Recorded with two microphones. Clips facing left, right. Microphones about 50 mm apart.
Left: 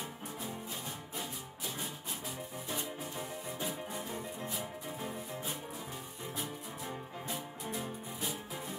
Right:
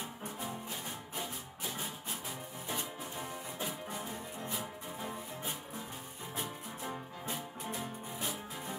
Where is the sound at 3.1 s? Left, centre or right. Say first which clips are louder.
Right 1 dB; centre.